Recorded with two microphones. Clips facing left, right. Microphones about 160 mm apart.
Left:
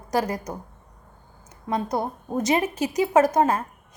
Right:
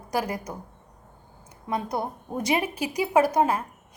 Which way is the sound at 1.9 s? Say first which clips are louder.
Left 3 dB; 25° left (ahead or behind).